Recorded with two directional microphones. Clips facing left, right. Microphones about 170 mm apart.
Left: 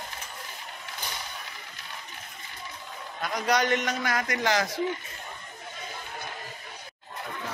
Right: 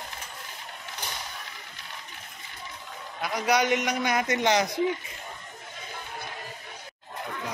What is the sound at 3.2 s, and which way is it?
A man's voice, 10° right (ahead or behind).